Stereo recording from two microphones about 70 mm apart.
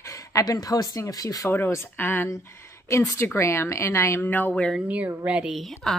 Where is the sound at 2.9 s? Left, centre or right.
Left.